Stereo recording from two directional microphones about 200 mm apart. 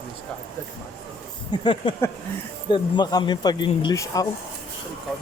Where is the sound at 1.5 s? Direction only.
25° left (ahead or behind).